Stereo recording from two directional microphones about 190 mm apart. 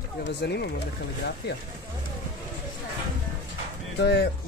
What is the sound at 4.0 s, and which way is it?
Speech, 60° left (ahead or behind).